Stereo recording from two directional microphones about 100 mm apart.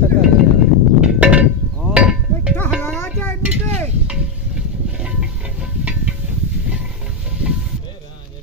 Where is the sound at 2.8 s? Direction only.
20° left (ahead or behind).